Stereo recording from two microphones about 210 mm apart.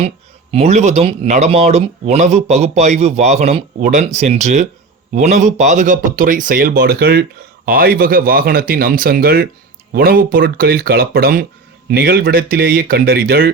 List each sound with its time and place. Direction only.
0.5 s speech: 30° right (ahead or behind); by 13.5 s 45° right (ahead or behind)